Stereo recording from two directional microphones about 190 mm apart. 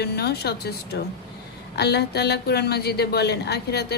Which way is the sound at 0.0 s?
60° left (ahead or behind).